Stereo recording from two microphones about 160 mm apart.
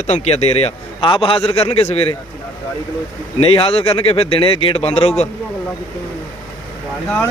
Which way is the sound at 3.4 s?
35° left (ahead or behind).